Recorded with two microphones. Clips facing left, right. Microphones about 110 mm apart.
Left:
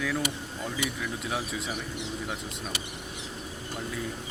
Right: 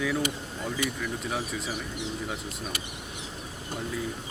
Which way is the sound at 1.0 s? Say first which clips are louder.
Right 1 dB; centre (ahead or behind).